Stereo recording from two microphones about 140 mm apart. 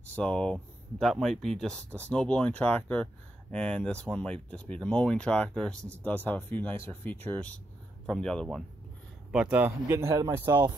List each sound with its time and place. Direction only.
0.0 s speech: 10° left (ahead or behind)
9.3 s speech: 10° right (ahead or behind)